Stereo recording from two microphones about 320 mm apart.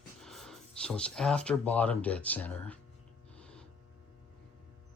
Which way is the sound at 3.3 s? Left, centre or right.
Centre.